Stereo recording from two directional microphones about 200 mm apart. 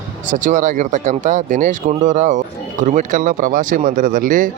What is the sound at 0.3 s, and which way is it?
Speech, 40° right (ahead or behind).